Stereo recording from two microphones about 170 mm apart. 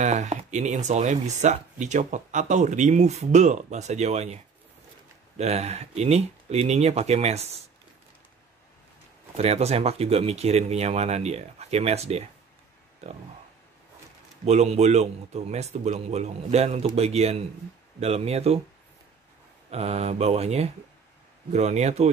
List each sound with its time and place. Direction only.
0.0 s speech: 45° right (ahead or behind)
5.4 s speech: 40° right (ahead or behind)
9.4 s speech: 40° right (ahead or behind)
14.4 s speech: 40° right (ahead or behind)
19.7 s speech: 40° right (ahead or behind)